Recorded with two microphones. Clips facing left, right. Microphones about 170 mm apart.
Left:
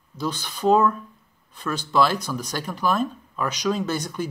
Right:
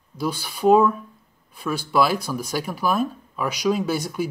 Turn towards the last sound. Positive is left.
turn(degrees=-10)  # may be behind; listen again after turning